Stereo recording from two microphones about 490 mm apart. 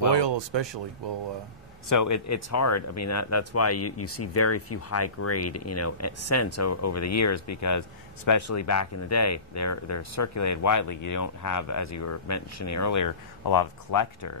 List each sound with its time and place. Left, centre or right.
0.1 s speech: right
1.9 s speech: left